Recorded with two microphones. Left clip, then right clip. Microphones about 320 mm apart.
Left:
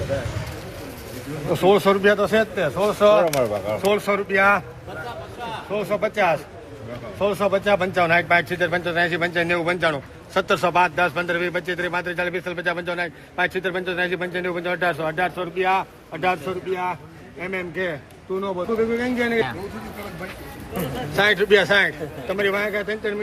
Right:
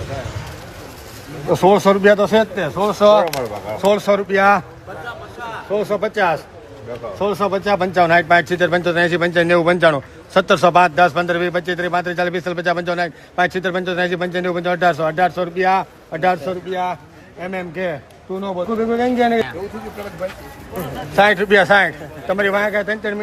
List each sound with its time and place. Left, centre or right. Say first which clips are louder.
1.6 s speech: right 4 dB; right
5.7 s speech: right 4 dB; centre
21.1 s speech: right 4 dB; right